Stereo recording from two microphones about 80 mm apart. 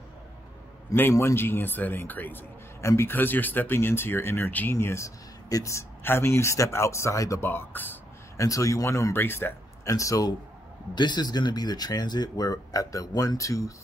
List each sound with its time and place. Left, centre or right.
1.1 s speech: left
2.8 s speech: left
7.4 s speech: left
8.4 s speech: left
9.8 s speech: left
11.0 s speech: left